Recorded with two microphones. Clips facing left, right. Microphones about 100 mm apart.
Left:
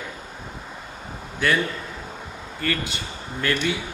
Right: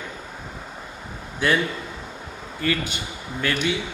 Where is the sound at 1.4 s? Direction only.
20° right (ahead or behind).